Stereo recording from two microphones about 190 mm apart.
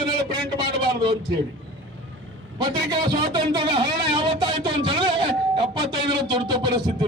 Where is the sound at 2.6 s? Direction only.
25° right (ahead or behind).